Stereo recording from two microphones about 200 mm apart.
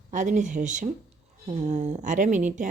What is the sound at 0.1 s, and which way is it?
A woman's voice, 40° right (ahead or behind).